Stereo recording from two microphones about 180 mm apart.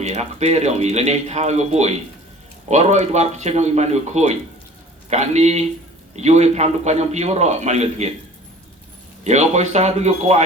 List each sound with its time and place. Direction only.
0.0 s speech: 40° right (ahead or behind)
9.2 s speech: 40° right (ahead or behind)